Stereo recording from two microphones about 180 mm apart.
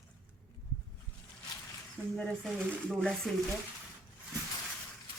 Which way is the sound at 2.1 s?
5° left (ahead or behind).